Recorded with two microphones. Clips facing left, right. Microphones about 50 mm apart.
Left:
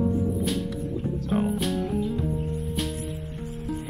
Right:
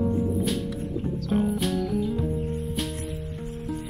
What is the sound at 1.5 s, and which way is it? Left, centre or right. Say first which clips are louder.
Music: even; centre.